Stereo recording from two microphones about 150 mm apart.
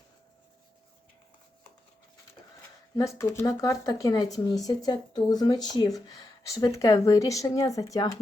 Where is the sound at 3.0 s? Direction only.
20° left (ahead or behind).